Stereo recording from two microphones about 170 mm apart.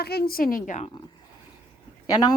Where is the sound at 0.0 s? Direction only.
65° left (ahead or behind).